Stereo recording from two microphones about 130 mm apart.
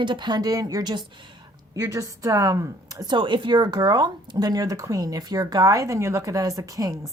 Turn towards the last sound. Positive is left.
turn(degrees=-25)  # may be behind; listen again after turning